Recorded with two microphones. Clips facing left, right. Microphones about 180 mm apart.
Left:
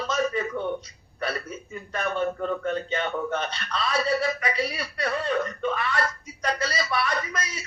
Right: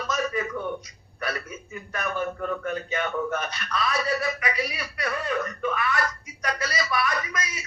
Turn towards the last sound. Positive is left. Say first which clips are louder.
# left 1 dB
turn(degrees=30)  # may be behind; listen again after turning